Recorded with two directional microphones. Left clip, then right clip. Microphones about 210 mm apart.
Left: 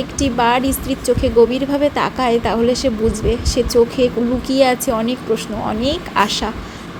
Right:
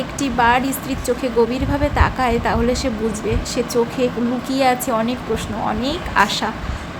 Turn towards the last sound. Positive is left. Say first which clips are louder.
# even
turn(degrees=15)  # may be behind; listen again after turning